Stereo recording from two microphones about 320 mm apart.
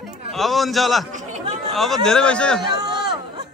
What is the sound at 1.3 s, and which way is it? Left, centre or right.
Chatter, right.